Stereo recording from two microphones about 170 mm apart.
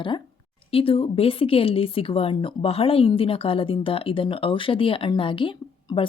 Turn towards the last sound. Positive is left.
turn(degrees=30)  # may be behind; listen again after turning